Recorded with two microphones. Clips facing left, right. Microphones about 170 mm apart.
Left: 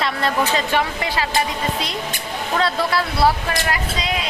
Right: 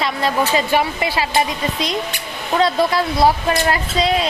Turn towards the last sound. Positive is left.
turn(degrees=-35)  # may be behind; listen again after turning